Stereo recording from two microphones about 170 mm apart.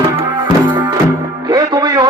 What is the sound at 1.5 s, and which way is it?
Music, 25° right (ahead or behind).